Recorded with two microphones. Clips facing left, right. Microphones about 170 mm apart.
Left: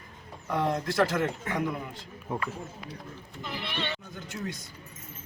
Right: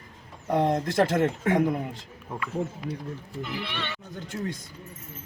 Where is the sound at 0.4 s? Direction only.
45° right (ahead or behind).